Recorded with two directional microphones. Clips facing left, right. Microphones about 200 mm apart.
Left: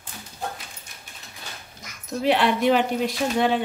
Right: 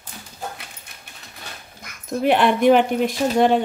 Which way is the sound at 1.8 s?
55° right (ahead or behind).